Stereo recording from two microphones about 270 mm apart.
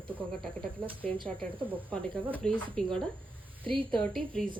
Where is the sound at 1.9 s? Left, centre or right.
Centre.